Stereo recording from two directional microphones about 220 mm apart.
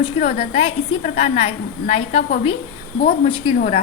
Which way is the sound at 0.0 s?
30° left (ahead or behind).